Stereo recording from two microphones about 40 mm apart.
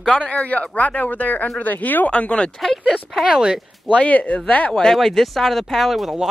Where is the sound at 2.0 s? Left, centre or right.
Left.